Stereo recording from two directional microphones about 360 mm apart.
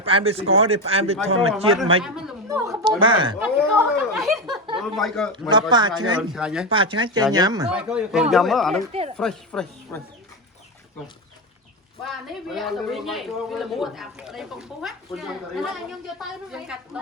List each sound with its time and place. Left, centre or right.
0.0 s speech: centre
0.4 s a man's voice: right
0.7 s speech: centre
2.0 s speech: centre
3.4 s speech: centre
5.3 s speech: centre
6.7 s speech: centre
8.9 s speech: centre
9.1 s speech: centre
12.0 s speech: centre